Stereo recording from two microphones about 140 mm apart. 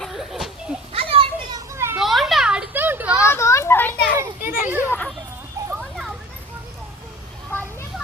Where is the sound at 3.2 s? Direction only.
20° left (ahead or behind).